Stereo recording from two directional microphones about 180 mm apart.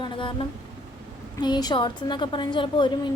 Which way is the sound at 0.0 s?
30° left (ahead or behind).